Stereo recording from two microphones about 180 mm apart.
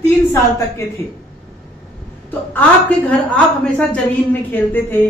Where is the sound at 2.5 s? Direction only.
5° left (ahead or behind).